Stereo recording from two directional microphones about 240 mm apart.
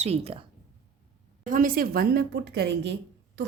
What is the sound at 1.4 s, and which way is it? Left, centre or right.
A woman's voice, right.